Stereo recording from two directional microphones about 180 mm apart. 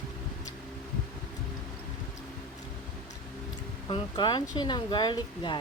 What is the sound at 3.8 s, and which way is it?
A woman's voice, 25° left (ahead or behind).